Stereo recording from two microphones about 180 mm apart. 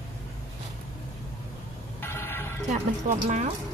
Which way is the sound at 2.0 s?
15° left (ahead or behind).